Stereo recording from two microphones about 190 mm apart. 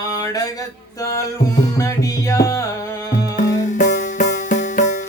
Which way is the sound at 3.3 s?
40° left (ahead or behind).